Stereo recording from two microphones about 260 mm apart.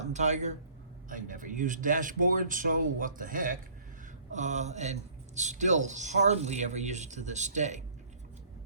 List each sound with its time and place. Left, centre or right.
0.0 s a man's voice: right